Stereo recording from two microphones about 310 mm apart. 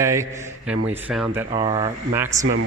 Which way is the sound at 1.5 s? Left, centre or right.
Centre.